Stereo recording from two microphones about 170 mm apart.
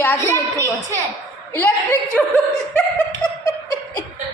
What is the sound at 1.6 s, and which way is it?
Speech, 15° left (ahead or behind).